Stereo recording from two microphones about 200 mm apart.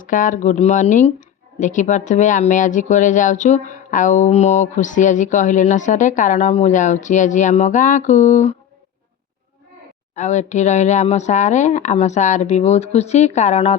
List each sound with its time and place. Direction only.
0.0 s speech: 40° left (ahead or behind)
10.2 s speech: 35° left (ahead or behind)